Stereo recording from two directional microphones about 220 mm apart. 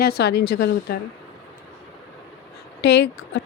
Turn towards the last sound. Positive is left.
turn(degrees=50)  # may be behind; listen again after turning